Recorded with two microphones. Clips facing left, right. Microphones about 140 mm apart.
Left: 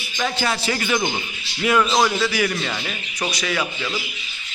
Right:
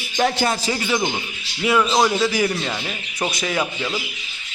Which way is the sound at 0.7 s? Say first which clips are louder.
Even; 15° right (ahead or behind).